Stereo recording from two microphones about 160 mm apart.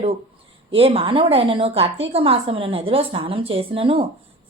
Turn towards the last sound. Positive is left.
turn(degrees=-35)  # may be behind; listen again after turning